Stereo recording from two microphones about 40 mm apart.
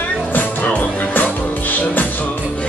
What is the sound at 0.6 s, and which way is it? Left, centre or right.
Music, left.